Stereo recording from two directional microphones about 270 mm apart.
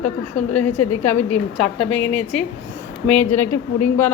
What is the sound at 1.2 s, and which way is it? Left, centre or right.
Speech, left.